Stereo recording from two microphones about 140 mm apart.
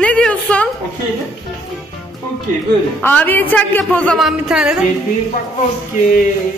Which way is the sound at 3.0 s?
15° left (ahead or behind).